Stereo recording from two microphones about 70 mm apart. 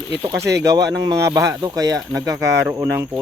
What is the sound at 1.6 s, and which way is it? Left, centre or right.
Speech, right.